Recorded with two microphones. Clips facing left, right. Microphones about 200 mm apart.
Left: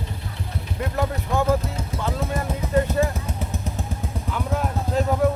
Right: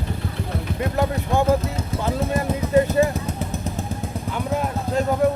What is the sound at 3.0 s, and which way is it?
Speech, 5° right (ahead or behind).